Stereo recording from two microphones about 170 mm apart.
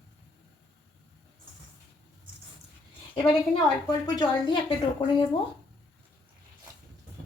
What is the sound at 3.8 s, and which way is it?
Speech, 25° left (ahead or behind).